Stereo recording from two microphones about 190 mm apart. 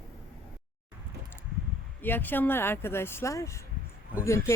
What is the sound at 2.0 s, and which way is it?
Speech, 10° left (ahead or behind).